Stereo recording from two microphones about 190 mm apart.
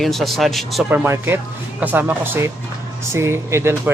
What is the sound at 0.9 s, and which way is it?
Speech, 10° right (ahead or behind).